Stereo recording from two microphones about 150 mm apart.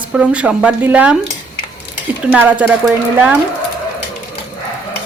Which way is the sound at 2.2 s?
10° right (ahead or behind).